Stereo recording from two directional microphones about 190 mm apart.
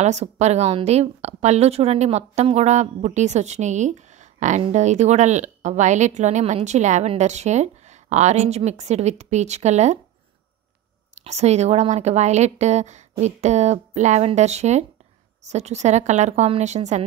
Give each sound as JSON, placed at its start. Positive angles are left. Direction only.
{"t": 0.0, "sound": "a woman's voice", "side_deg": -35}
{"t": 11.1, "sound": "a woman's voice", "side_deg": -35}